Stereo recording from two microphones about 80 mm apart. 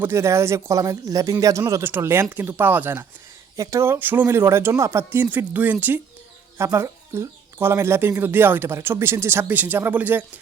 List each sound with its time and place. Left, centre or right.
0.0 s speech: right
1.8 s speech: right
3.6 s speech: right
3.9 s speech: right
5.2 s speech: right
6.6 s speech: right